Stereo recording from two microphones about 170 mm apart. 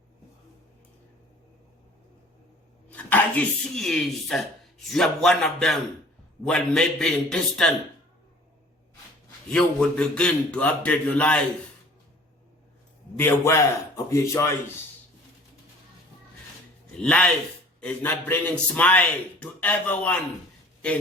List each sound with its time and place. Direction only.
2.9 s speech: 10° left (ahead or behind)
9.5 s a man's voice: 5° left (ahead or behind)
13.1 s a man's voice: 15° left (ahead or behind)
17.0 s a man's voice: 5° left (ahead or behind)